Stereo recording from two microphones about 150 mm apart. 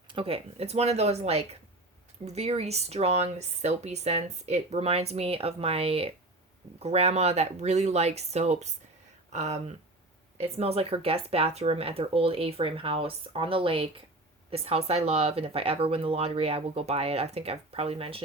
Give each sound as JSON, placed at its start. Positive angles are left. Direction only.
{"t": 0.1, "sound": "speech", "side_deg": -40}